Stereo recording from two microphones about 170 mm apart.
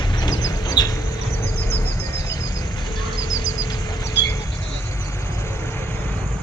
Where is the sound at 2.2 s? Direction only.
20° left (ahead or behind).